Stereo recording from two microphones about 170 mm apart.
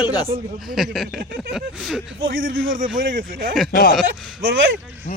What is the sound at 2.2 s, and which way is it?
Speech, 60° right (ahead or behind).